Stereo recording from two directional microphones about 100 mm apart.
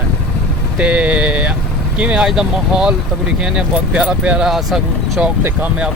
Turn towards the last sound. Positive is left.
turn(degrees=-15)  # may be behind; listen again after turning